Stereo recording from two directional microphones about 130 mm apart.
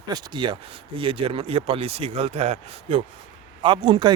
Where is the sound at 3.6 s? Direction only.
35° right (ahead or behind).